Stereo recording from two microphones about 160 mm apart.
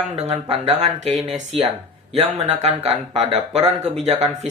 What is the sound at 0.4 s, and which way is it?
Speech, 40° right (ahead or behind).